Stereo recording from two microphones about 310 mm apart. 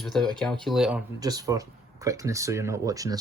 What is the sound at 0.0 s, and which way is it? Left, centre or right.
Speech, centre.